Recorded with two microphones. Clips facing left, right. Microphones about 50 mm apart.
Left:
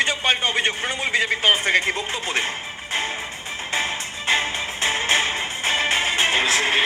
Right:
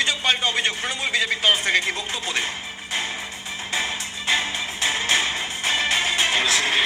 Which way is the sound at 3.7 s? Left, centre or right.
Left.